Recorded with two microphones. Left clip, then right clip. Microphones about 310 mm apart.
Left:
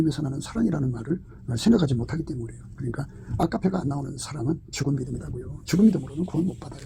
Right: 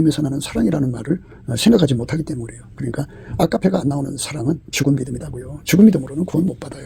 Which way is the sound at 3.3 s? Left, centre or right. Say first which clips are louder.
Right 8 dB; right.